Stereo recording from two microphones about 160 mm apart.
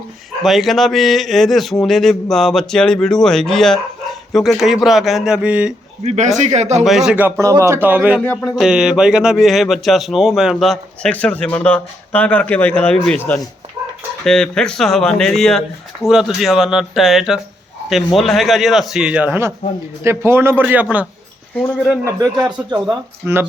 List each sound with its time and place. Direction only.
0.4 s speech: centre (ahead or behind)
6.0 s a man's voice: 45° right (ahead or behind)
6.8 s speech: centre (ahead or behind)
8.2 s speech: 10° left (ahead or behind)
8.5 s speech: 5° right (ahead or behind)
22.4 s speech: 30° right (ahead or behind)
22.7 s speech: 10° right (ahead or behind)